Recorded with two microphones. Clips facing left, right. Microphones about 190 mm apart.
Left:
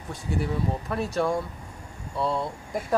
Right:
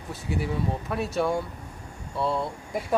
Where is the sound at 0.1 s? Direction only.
Centre (ahead or behind).